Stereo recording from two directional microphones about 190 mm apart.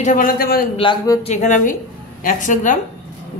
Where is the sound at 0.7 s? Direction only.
20° left (ahead or behind).